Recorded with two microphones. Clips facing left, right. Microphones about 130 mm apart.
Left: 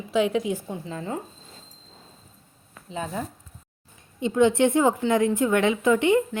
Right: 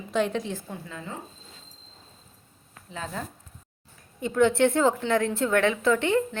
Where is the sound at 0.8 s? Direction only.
35° left (ahead or behind).